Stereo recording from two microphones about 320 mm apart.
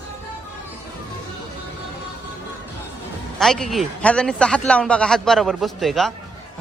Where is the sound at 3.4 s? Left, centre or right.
Centre.